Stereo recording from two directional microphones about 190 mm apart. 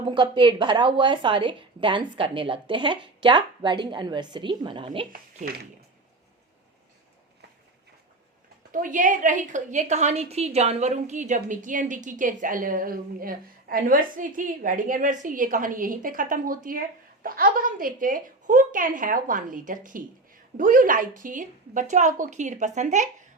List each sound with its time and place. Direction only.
0.0 s a woman's voice: 25° right (ahead or behind)
5.1 s speech: 50° right (ahead or behind)
8.7 s a woman's voice: 45° right (ahead or behind)